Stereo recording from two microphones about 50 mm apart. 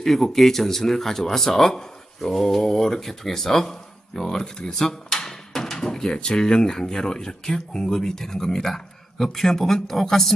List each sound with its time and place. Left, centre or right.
0.0 s speech: centre